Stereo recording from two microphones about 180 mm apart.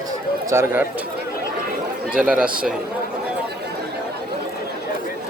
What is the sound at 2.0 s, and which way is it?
Speech, 5° right (ahead or behind).